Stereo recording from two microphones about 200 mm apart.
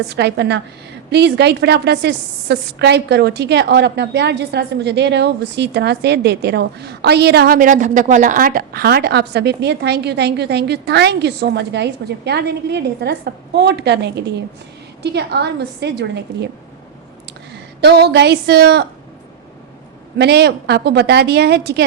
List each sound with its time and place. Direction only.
0.1 s a woman's voice: 60° right (ahead or behind)
17.7 s a woman's voice: 55° right (ahead or behind)
20.1 s a woman's voice: 55° right (ahead or behind)